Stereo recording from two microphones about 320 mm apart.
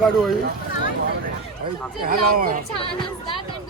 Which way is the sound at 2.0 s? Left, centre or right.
Right.